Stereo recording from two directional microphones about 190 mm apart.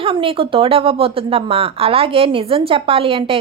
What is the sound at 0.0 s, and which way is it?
A woman's voice, 30° right (ahead or behind).